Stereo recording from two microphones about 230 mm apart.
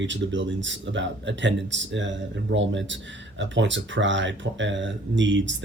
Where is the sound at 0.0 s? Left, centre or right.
Right.